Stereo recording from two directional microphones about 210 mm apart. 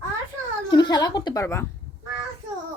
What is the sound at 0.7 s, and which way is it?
Speech, 20° left (ahead or behind).